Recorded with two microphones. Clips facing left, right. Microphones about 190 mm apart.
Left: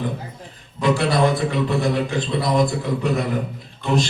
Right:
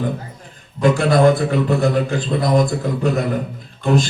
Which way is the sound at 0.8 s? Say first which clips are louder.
Right 4 dB; 50° right (ahead or behind).